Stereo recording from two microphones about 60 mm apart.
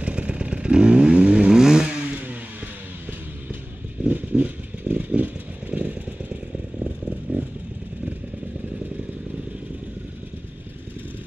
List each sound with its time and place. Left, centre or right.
0.0 s motorcycle: centre
4.1 s vehicle: right
6.8 s motorcycle: centre